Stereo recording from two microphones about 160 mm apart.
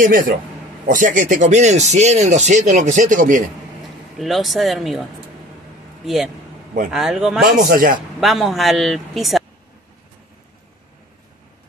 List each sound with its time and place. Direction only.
0.8 s speech: 55° right (ahead or behind)
4.2 s speech: centre (ahead or behind)
6.0 s speech: centre (ahead or behind)
7.4 s a man's voice: 65° right (ahead or behind)
8.2 s speech: centre (ahead or behind)